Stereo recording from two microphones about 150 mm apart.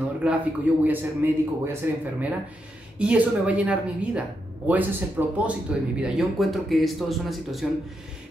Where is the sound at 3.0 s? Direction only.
10° right (ahead or behind).